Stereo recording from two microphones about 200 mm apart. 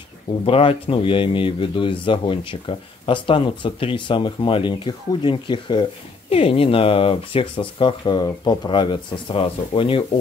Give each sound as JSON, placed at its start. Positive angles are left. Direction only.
{"t": 0.5, "sound": "speech", "side_deg": 30}